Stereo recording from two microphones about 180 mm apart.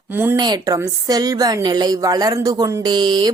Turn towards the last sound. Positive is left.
turn(degrees=-25)  # may be behind; listen again after turning